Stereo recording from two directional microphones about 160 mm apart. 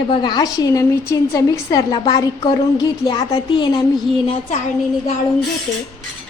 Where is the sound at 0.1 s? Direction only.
30° left (ahead or behind).